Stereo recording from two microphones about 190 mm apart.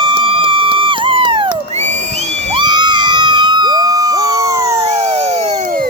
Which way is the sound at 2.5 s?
25° right (ahead or behind).